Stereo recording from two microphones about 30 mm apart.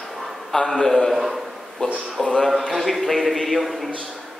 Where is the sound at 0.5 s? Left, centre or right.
Centre.